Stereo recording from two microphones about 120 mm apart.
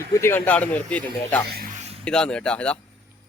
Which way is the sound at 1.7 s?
65° right (ahead or behind).